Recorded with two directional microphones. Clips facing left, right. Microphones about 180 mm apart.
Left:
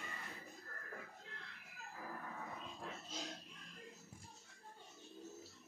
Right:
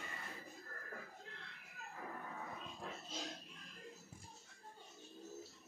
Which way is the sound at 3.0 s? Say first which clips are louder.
Right 1 dB; centre (ahead or behind).